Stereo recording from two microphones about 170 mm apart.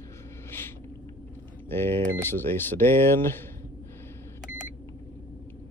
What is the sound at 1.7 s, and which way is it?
Speech, 15° left (ahead or behind).